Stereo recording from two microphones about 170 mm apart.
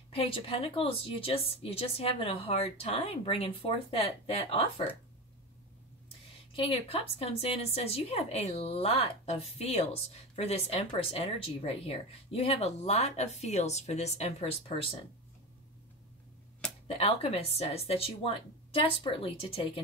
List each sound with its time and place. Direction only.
0.1 s speech: 35° left (ahead or behind)
6.5 s speech: 35° left (ahead or behind)
16.8 s speech: 35° left (ahead or behind)